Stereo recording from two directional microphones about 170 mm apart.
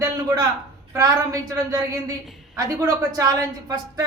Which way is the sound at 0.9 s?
20° right (ahead or behind).